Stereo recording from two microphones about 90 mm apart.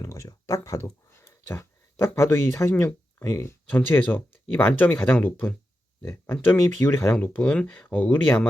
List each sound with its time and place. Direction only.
0.0 s a sound: 35° left (ahead or behind)
2.0 s speech: 30° left (ahead or behind)
3.7 s speech: 20° left (ahead or behind)